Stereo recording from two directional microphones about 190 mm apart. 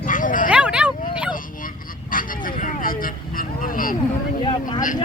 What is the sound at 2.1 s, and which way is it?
Vehicle, 45° left (ahead or behind).